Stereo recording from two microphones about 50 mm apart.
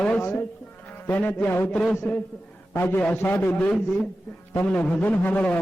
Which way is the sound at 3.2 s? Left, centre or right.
Left.